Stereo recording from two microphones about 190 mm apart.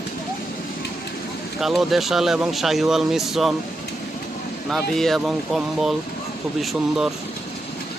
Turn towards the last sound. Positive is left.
turn(degrees=0)  # may be behind; listen again after turning